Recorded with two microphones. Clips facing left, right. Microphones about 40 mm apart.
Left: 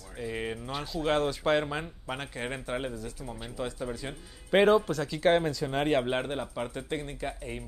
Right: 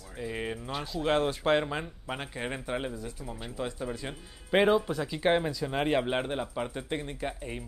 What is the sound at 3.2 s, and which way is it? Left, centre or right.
Speech, centre.